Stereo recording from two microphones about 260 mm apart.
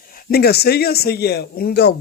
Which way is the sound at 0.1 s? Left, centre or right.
Left.